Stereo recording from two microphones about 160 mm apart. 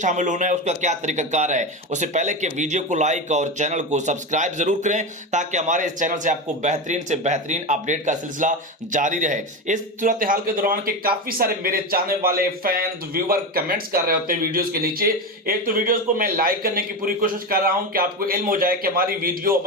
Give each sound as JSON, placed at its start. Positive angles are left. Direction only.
{"t": 0.0, "sound": "speech", "side_deg": -50}